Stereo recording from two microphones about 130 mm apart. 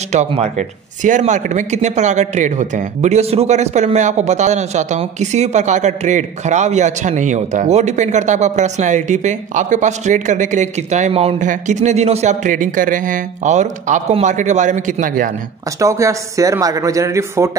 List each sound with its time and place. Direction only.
0.1 s speech: 65° right (ahead or behind)
11.4 s speech: 70° right (ahead or behind); by 15.3 s 90° right
15.8 s a man's voice: 25° right (ahead or behind)